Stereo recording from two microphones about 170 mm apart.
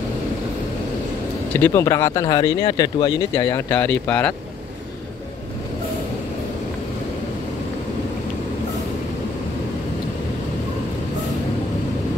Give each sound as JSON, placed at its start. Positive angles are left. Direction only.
{"t": 1.5, "sound": "speech", "side_deg": 15}